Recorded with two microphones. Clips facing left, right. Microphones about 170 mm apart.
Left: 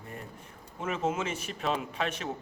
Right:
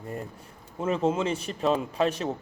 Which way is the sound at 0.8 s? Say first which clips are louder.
Right 6 dB; 30° right (ahead or behind).